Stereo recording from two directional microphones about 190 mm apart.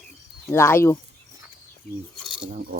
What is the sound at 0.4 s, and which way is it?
Speech, 15° left (ahead or behind).